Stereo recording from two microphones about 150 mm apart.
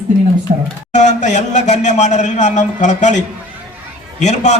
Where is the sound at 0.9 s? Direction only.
50° left (ahead or behind).